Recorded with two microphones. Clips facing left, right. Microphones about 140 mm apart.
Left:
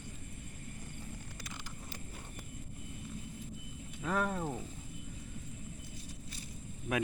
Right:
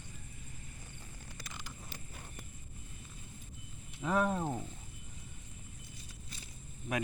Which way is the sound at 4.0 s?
10° right (ahead or behind).